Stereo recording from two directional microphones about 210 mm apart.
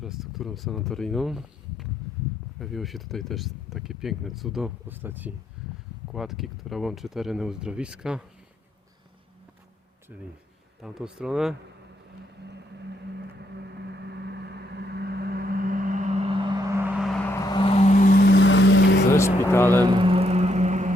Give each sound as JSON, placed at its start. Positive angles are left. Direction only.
{"t": 0.0, "sound": "speech", "side_deg": 0}
{"t": 5.6, "sound": "a sound", "side_deg": -5}
{"t": 6.1, "sound": "speech", "side_deg": 0}
{"t": 10.8, "sound": "speech", "side_deg": -5}
{"t": 13.4, "sound": "vehicle", "side_deg": -55}
{"t": 17.0, "sound": "vehicle", "side_deg": 5}
{"t": 17.4, "sound": "vehicle", "side_deg": 20}
{"t": 19.1, "sound": "speech", "side_deg": 15}
{"t": 19.8, "sound": "music", "side_deg": -25}